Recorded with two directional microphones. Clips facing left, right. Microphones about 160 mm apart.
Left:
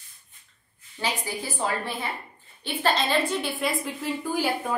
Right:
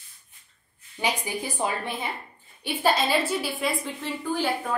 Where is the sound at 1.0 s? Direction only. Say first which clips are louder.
Right 2 dB; 15° right (ahead or behind).